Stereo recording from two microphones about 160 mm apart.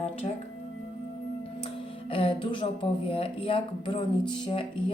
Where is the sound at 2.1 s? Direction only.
35° left (ahead or behind).